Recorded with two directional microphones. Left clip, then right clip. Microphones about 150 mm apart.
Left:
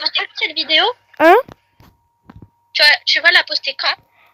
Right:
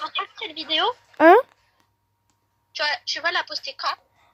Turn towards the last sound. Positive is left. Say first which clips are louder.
# left 9 dB
turn(degrees=35)  # may be behind; listen again after turning